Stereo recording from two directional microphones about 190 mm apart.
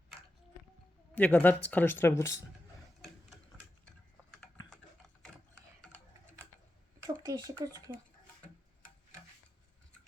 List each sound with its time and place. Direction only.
1.1 s speech: 10° left (ahead or behind)
4.7 s a sound: 5° left (ahead or behind)
7.3 s speech: 20° right (ahead or behind)